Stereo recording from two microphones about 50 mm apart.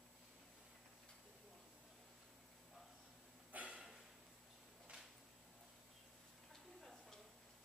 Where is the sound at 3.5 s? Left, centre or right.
Right.